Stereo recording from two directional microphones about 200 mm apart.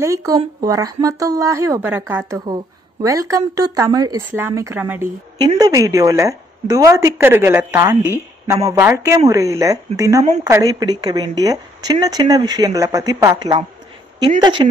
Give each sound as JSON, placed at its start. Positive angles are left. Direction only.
{"t": 0.0, "sound": "a woman's voice", "side_deg": -15}